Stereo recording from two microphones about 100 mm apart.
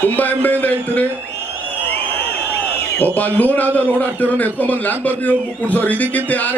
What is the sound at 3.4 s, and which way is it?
A man's voice, 15° left (ahead or behind).